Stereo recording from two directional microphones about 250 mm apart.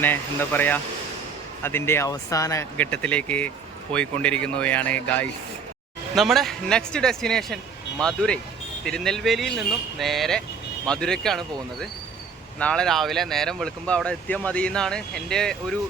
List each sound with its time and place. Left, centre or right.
0.0 s speech: centre
12.5 s speech: centre